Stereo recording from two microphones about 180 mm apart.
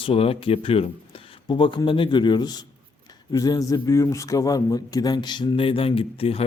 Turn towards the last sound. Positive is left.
turn(degrees=30)  # may be behind; listen again after turning